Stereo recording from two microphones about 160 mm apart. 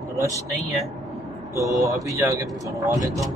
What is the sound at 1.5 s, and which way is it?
Vehicle, 20° right (ahead or behind).